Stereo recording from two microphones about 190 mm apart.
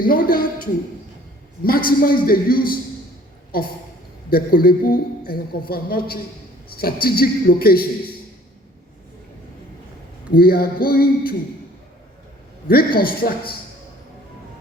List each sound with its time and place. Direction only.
0.0 s a woman's voice: 50° left (ahead or behind)
10.3 s a woman's voice: 50° left (ahead or behind)
12.6 s a woman's voice: 50° left (ahead or behind)